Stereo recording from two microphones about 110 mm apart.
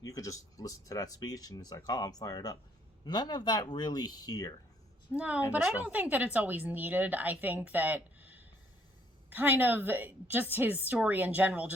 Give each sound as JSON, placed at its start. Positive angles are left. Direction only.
{"t": 0.0, "sound": "speech", "side_deg": 30}
{"t": 5.1, "sound": "speech", "side_deg": -10}